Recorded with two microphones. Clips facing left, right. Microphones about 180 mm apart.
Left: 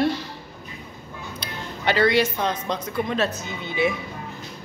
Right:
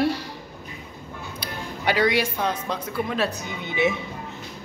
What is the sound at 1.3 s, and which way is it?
Speech, 10° right (ahead or behind).